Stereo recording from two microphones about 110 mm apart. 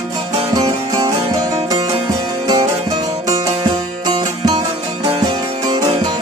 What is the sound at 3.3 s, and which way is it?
Music, 40° right (ahead or behind).